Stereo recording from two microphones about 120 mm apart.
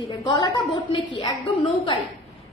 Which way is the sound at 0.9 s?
45° left (ahead or behind).